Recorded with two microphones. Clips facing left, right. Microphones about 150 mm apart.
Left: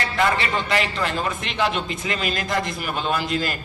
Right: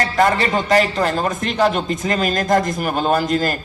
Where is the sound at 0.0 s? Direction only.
40° right (ahead or behind).